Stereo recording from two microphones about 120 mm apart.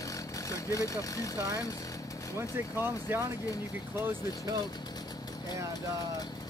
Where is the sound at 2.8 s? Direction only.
20° right (ahead or behind).